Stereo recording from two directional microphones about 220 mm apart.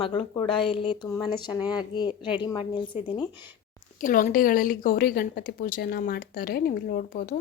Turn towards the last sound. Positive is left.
turn(degrees=40)  # may be behind; listen again after turning